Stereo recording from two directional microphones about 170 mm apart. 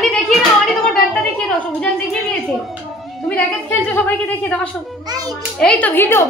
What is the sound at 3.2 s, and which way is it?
A woman's voice, 10° left (ahead or behind).